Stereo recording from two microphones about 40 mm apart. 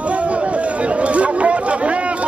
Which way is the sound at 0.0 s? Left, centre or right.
Right.